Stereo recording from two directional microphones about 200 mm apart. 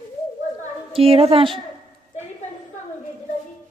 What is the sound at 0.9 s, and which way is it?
Speech, 30° right (ahead or behind).